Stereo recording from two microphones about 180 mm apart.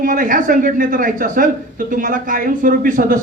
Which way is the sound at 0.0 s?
50° right (ahead or behind).